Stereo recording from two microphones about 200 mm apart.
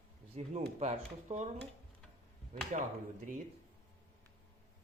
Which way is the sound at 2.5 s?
35° right (ahead or behind).